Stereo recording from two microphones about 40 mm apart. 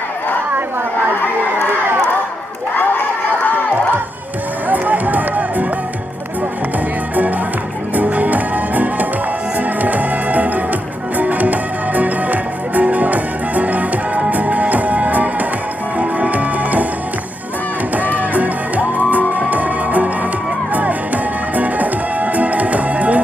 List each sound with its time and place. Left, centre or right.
4.7 s music: right
7.9 s music: right
17.9 s music: right
21.5 s music: right